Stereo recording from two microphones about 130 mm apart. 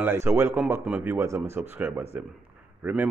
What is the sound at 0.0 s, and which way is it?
Speech, 20° right (ahead or behind).